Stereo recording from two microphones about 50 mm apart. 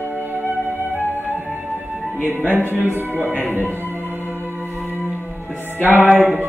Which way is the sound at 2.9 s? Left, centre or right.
Right.